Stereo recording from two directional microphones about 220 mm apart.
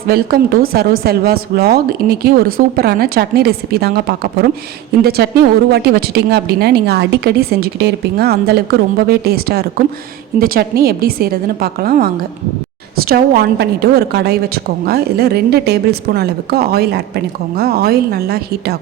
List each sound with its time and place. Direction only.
0.1 s a woman's voice: 45° right (ahead or behind)